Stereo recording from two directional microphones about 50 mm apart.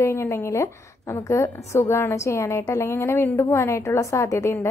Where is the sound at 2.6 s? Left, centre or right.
Left.